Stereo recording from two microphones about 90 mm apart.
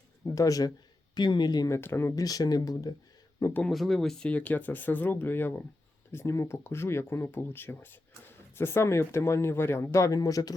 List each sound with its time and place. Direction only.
0.3 s speech: 40° left (ahead or behind)
1.1 s speech: 55° left (ahead or behind)
1.6 s speech: 30° left (ahead or behind)
2.1 s speech: 45° left (ahead or behind)
3.7 s speech: centre (ahead or behind)
4.3 s speech: 15° left (ahead or behind); by 10.5 s 45° left (ahead or behind)